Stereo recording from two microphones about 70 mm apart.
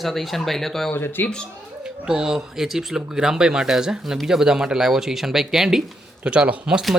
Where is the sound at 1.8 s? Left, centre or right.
Centre.